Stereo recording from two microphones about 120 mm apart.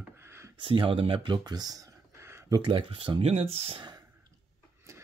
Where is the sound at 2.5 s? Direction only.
45° right (ahead or behind).